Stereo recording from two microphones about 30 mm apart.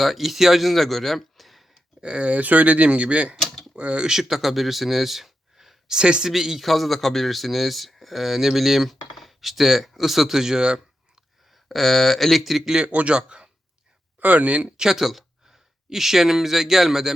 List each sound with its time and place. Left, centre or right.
0.0 s speech: centre
2.0 s speech: right
2.4 s speech: right
3.8 s speech: right
4.2 s speech: centre
5.9 s speech: right
6.2 s speech: centre
6.6 s speech: centre; by 11.2 s right
11.5 s speech: centre
13.1 s speech: right
14.2 s speech: right
14.9 s speech: centre